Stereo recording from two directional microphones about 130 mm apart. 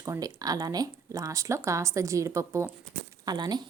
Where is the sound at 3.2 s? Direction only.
35° right (ahead or behind).